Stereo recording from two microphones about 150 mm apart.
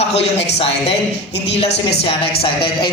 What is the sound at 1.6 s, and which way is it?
Speech, 90° left.